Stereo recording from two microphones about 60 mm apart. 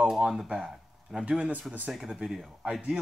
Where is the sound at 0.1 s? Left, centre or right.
Centre.